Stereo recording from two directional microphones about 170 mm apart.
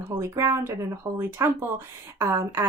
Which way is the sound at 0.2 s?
15° right (ahead or behind).